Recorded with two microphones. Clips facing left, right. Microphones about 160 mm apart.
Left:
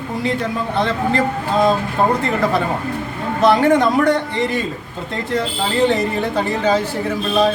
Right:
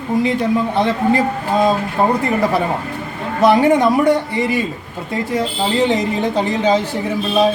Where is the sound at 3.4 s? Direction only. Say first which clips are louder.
Right 1 dB; 15° right (ahead or behind).